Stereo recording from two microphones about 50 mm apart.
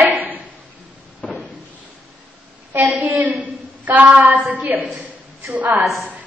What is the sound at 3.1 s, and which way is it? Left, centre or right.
A woman's voice, right.